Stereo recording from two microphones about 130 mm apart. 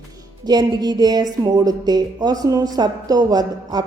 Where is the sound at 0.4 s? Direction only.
30° right (ahead or behind).